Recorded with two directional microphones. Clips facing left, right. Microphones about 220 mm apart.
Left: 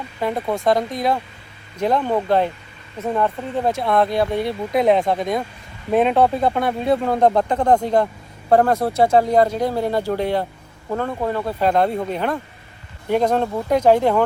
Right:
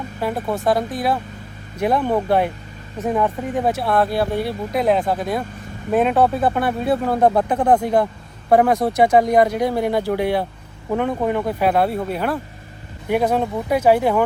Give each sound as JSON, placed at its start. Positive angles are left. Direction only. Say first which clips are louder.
{"t": 0.2, "sound": "speech", "louder": "left 1 dB", "side_deg": -5}